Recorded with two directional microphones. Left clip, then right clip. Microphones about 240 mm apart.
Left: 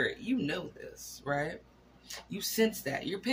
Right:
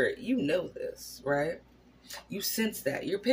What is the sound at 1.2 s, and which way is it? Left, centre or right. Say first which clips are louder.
Speech: right 4 dB; centre.